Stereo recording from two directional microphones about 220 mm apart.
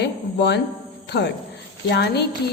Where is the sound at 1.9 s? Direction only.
50° left (ahead or behind).